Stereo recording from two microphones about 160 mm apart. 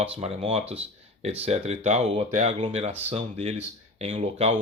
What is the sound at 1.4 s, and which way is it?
Speech, 40° right (ahead or behind).